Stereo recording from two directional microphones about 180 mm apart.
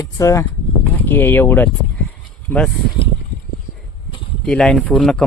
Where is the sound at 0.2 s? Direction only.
15° left (ahead or behind).